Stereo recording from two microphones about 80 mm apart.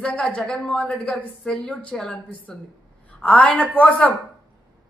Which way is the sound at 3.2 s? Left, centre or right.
Centre.